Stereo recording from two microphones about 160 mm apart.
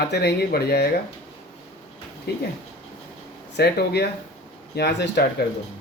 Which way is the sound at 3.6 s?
90° left.